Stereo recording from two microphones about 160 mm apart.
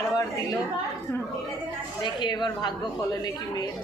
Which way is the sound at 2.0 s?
30° left (ahead or behind).